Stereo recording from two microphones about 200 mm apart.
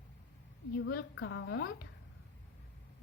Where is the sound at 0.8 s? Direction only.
70° left (ahead or behind).